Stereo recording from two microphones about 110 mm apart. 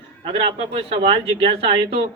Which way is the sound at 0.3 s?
60° right (ahead or behind).